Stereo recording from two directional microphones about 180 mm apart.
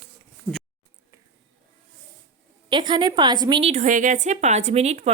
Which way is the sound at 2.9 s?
25° right (ahead or behind).